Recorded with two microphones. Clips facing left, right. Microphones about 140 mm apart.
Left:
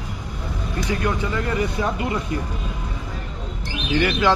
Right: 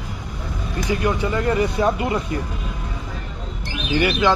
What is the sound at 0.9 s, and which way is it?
Speech, 15° right (ahead or behind).